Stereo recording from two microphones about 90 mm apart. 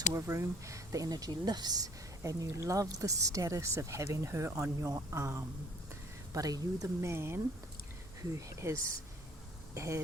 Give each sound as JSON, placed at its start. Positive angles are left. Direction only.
{"t": 0.1, "sound": "speech", "side_deg": -35}
{"t": 6.3, "sound": "speech", "side_deg": -45}
{"t": 6.8, "sound": "speech", "side_deg": -30}